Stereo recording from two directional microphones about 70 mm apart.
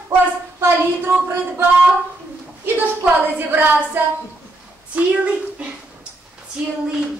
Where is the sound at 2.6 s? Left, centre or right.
Right.